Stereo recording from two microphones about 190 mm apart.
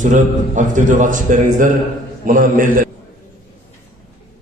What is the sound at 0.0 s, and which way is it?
A man's voice, 40° right (ahead or behind).